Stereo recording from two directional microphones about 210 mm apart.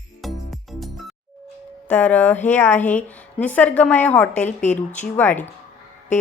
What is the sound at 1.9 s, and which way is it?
A woman's voice, 5° left (ahead or behind).